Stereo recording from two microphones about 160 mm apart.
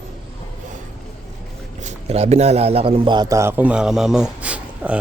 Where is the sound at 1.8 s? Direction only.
40° right (ahead or behind); by 5.0 s 10° right (ahead or behind).